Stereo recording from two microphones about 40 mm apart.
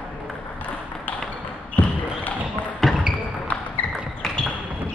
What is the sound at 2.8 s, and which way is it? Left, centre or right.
Basketball bounce, centre.